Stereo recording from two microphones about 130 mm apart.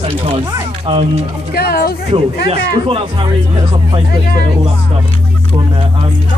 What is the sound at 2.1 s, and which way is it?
Speech, 45° right (ahead or behind).